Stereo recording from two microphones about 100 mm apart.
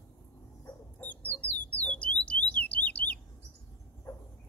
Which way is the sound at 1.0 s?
15° left (ahead or behind).